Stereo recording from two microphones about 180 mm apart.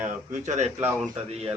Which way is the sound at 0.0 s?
40° right (ahead or behind).